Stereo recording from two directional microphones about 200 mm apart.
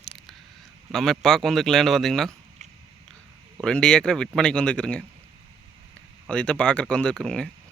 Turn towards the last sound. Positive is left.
turn(degrees=5)  # may be behind; listen again after turning